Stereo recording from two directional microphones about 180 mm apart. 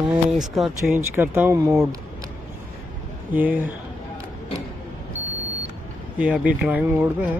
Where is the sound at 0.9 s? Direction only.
10° right (ahead or behind).